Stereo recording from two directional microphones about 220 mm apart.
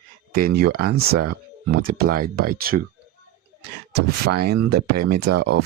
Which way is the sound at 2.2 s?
40° right (ahead or behind).